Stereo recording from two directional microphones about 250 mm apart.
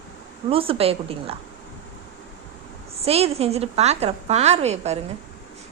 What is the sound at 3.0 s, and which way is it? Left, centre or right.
A woman's voice, right.